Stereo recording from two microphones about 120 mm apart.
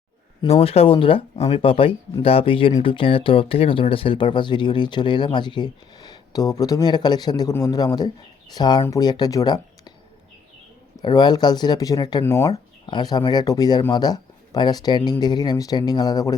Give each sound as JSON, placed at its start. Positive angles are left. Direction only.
{"t": 0.4, "sound": "speech", "side_deg": 55}
{"t": 11.0, "sound": "speech", "side_deg": 35}
{"t": 12.8, "sound": "speech", "side_deg": 35}